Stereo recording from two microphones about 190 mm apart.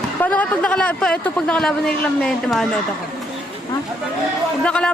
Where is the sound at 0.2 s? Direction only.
10° left (ahead or behind).